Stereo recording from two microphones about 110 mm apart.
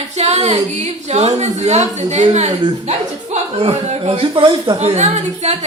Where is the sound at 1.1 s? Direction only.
90° right.